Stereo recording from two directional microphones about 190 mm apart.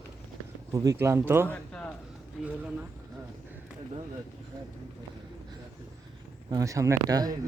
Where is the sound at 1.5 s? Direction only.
5° left (ahead or behind).